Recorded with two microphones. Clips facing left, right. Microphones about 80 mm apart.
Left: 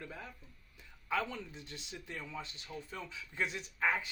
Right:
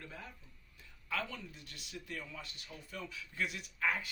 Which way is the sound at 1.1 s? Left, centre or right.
Left.